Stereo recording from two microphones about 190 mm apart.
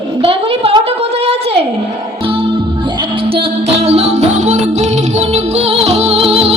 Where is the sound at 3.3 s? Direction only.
30° right (ahead or behind).